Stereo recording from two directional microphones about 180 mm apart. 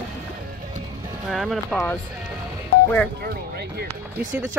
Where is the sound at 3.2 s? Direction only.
60° right (ahead or behind).